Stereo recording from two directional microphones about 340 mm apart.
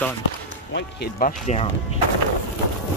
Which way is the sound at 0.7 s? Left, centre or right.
Left.